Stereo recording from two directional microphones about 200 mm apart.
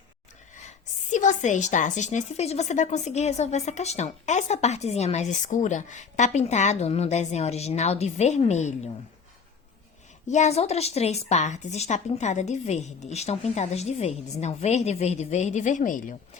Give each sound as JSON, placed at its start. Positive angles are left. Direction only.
{"t": 1.1, "sound": "a woman's voice", "side_deg": 40}
{"t": 10.2, "sound": "a woman's voice", "side_deg": 35}